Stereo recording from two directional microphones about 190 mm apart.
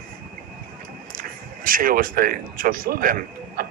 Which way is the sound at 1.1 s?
50° right (ahead or behind).